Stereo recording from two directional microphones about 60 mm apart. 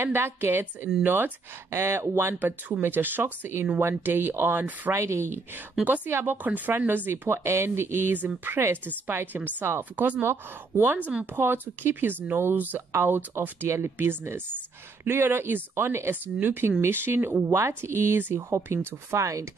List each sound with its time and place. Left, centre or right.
0.0 s speech: right
2.8 s speech: right
4.9 s speech: right
5.9 s speech: right
7.1 s speech: right
17.4 s speech: right